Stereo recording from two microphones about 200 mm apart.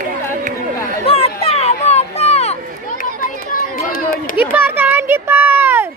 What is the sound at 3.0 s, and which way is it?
Run, 45° left (ahead or behind).